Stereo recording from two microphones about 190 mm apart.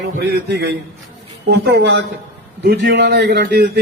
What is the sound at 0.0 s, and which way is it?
A man's voice, 60° right (ahead or behind).